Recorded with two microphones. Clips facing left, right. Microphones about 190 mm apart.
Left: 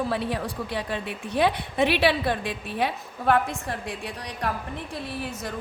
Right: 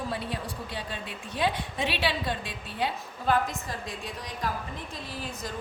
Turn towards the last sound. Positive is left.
turn(degrees=65)  # may be behind; listen again after turning